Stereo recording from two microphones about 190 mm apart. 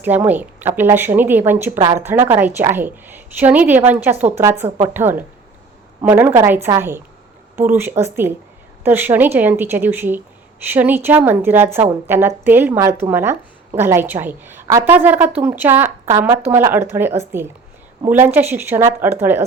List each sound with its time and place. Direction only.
0.0 s a woman's voice: 10° right (ahead or behind)
1.8 s a woman's voice: 25° right (ahead or behind)
2.0 s a woman's voice: 10° right (ahead or behind)